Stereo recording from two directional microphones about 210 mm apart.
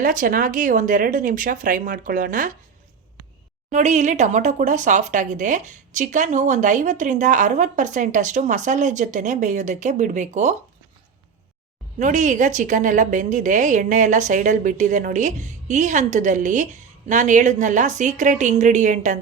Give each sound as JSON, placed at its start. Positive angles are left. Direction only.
{"t": 0.0, "sound": "speech", "side_deg": -40}
{"t": 3.7, "sound": "speech", "side_deg": -35}
{"t": 11.9, "sound": "speech", "side_deg": -35}